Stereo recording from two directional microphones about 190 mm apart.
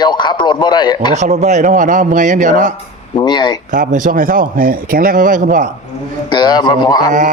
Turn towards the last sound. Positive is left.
turn(degrees=-40)  # may be behind; listen again after turning